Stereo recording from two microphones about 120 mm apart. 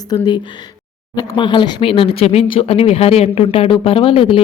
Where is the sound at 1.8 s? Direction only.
50° left (ahead or behind).